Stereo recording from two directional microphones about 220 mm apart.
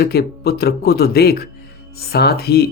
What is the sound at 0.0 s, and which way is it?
Speech, 45° left (ahead or behind).